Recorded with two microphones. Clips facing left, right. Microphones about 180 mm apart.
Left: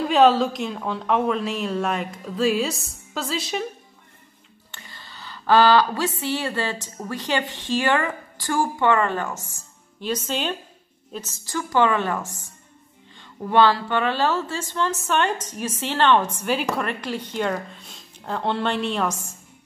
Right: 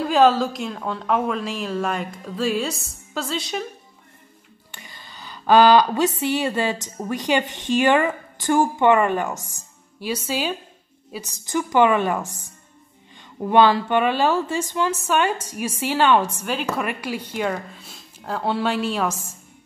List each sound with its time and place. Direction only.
0.0 s a woman's voice: centre (ahead or behind)
4.6 s a woman's voice: 15° right (ahead or behind)
13.4 s a woman's voice: 15° right (ahead or behind)